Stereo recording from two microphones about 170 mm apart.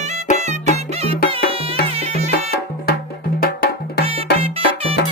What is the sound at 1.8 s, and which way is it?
Music, 35° right (ahead or behind).